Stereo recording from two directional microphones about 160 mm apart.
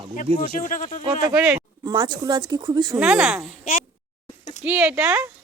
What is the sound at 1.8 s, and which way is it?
Speech, 30° right (ahead or behind).